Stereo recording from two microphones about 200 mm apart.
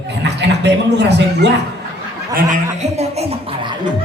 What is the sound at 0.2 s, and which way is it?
A man's voice, 60° right (ahead or behind).